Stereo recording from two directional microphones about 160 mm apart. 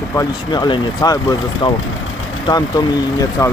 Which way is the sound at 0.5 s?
30° left (ahead or behind).